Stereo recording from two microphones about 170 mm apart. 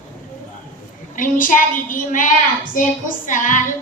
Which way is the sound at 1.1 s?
50° left (ahead or behind).